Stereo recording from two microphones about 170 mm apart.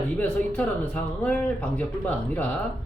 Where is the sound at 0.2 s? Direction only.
10° left (ahead or behind).